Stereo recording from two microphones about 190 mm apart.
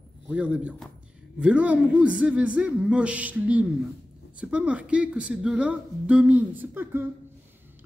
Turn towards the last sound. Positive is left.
turn(degrees=-10)  # may be behind; listen again after turning